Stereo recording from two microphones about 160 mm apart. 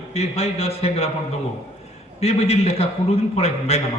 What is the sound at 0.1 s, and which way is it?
A man's voice, 40° left (ahead or behind).